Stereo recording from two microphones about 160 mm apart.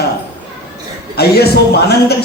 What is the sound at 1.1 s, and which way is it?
A man's voice, 80° left.